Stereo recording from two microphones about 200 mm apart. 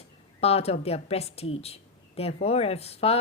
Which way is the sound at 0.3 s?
30° left (ahead or behind).